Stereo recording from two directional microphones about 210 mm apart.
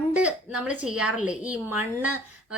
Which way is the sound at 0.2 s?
5° right (ahead or behind).